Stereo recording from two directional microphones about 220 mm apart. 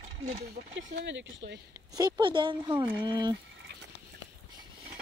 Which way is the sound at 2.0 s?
20° right (ahead or behind).